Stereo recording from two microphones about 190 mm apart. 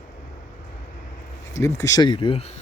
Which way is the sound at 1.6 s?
15° left (ahead or behind).